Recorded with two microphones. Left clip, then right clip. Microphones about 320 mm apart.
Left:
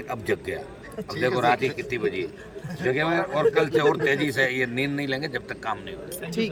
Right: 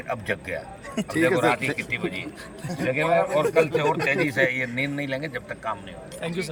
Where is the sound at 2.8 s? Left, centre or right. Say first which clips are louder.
Right 2 dB; centre.